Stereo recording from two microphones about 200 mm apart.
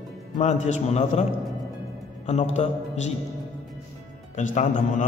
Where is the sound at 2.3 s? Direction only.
35° left (ahead or behind).